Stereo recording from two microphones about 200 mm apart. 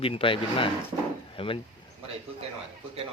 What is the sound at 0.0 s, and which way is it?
Speech, 25° left (ahead or behind).